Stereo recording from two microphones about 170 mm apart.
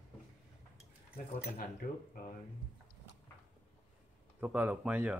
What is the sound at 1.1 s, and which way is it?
Speech, 55° left (ahead or behind).